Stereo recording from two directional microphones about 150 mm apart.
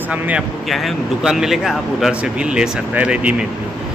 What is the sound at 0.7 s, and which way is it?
A man's voice, centre (ahead or behind).